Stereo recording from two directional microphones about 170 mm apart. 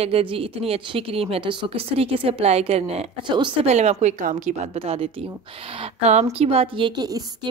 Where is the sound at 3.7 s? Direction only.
40° right (ahead or behind).